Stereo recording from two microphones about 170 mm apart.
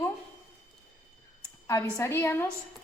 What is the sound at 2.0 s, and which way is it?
Speech, 15° left (ahead or behind).